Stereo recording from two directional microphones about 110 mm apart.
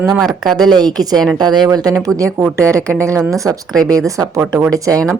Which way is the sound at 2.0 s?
30° right (ahead or behind).